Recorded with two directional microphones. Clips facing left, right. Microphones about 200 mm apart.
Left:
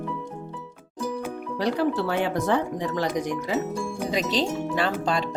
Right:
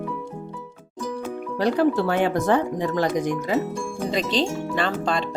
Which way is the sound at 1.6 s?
50° right (ahead or behind).